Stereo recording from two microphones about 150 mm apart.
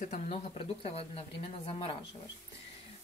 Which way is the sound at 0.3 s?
40° left (ahead or behind).